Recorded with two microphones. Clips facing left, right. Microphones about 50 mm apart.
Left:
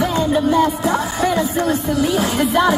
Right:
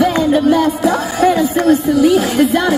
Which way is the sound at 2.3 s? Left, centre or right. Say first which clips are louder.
Right 3 dB; centre.